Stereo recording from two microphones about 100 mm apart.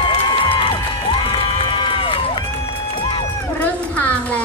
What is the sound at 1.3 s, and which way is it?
Run, 60° left (ahead or behind).